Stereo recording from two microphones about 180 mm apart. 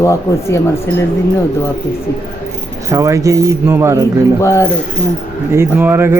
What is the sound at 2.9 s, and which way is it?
Speech, 15° right (ahead or behind).